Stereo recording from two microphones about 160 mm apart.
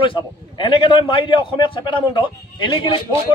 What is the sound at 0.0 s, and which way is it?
A man's voice, 30° left (ahead or behind).